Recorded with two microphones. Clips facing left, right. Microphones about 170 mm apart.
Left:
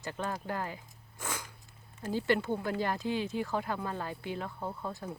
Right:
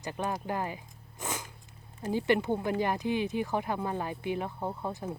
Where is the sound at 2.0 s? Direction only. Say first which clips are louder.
Right 3 dB; 15° right (ahead or behind).